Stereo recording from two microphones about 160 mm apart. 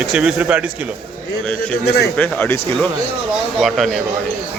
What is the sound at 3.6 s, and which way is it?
Speech, centre (ahead or behind).